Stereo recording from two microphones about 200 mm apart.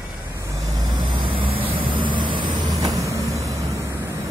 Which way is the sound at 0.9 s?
20° right (ahead or behind).